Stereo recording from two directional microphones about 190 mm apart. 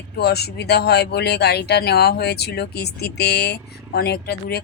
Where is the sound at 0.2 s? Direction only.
60° left (ahead or behind).